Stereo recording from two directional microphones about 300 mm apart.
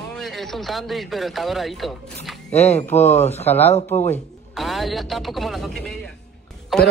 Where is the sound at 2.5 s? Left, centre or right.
Left.